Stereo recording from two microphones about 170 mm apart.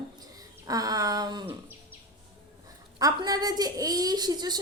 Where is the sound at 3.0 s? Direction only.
20° right (ahead or behind).